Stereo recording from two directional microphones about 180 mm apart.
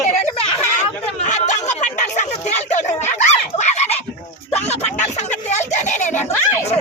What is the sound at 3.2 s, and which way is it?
Goose, 40° left (ahead or behind).